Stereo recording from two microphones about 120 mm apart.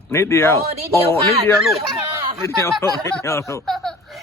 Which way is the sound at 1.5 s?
5° right (ahead or behind).